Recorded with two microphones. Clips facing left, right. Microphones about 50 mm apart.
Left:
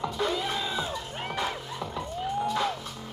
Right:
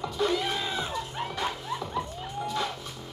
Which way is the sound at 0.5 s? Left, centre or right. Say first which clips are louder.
Even; centre.